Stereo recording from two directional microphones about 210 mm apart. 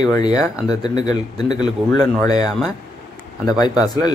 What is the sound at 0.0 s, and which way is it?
Speech, 20° left (ahead or behind).